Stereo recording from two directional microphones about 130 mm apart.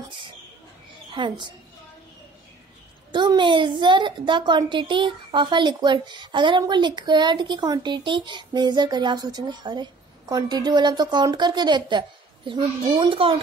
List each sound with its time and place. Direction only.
1.1 s speech: 40° right (ahead or behind)
3.1 s speech: 35° right (ahead or behind)